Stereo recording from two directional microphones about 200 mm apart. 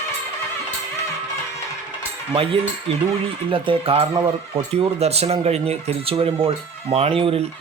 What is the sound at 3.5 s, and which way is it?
Speech, 25° right (ahead or behind).